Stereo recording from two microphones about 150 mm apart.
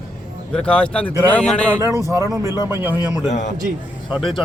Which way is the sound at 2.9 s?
30° left (ahead or behind).